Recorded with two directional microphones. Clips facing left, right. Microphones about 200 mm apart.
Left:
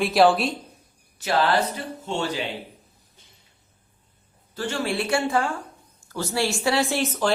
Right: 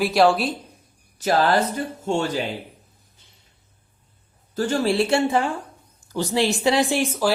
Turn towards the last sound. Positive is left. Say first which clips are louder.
# right 3 dB
turn(degrees=-10)  # may be behind; listen again after turning